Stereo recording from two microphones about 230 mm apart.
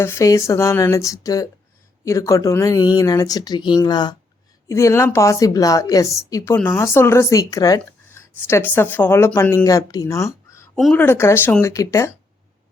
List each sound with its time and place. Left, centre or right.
0.0 s a woman's voice: centre